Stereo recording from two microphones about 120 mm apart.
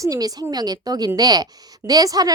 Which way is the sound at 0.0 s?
30° right (ahead or behind).